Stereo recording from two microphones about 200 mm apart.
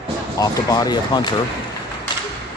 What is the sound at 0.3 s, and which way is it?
Speech, 20° left (ahead or behind).